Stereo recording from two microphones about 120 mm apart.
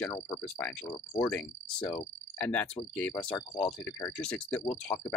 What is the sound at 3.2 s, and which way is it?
Speech, 25° left (ahead or behind).